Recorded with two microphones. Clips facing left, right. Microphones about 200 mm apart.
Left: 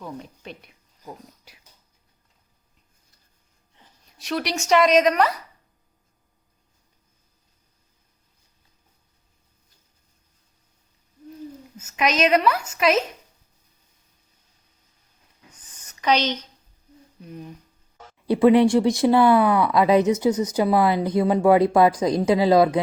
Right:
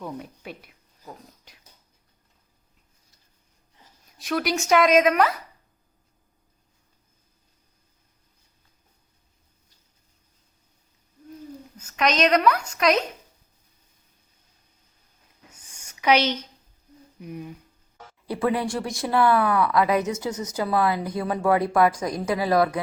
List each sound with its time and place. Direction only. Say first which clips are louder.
0.0 s speech: right 1 dB; 5° right (ahead or behind)
4.2 s speech: right 1 dB; centre (ahead or behind)
11.8 s a woman's voice: left 1 dB; 5° left (ahead or behind)
15.5 s a sound: even; 10° right (ahead or behind)
17.2 s speech: right 2 dB; 10° right (ahead or behind)
18.3 s speech: left 9 dB; 20° left (ahead or behind)